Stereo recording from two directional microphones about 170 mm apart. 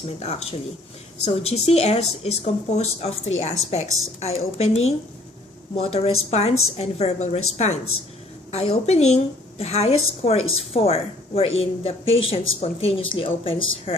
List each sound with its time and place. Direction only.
0.2 s a woman's voice: 40° left (ahead or behind)